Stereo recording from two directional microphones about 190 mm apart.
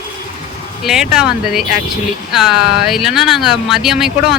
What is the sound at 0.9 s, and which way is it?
Speech, 5° right (ahead or behind).